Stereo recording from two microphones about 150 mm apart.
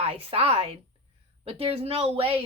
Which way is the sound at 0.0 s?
40° right (ahead or behind).